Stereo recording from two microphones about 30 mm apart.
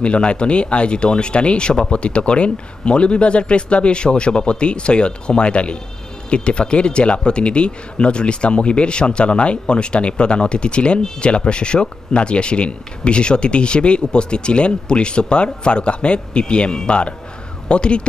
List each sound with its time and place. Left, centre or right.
0.0 s speech: left